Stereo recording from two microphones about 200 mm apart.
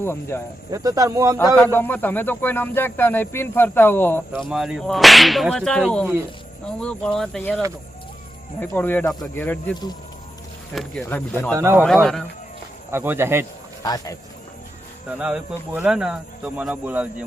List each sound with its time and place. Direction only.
0.0 s speech: 10° left (ahead or behind)
0.7 s speech: 15° right (ahead or behind)
1.5 s speech: 10° left (ahead or behind)
8.6 s speech: 10° left (ahead or behind)
10.8 s speech: 5° left (ahead or behind)
11.5 s speech: 15° right (ahead or behind)
12.9 s speech: 10° right (ahead or behind)
13.8 s speech: 20° left (ahead or behind)
15.2 s speech: 5° right (ahead or behind)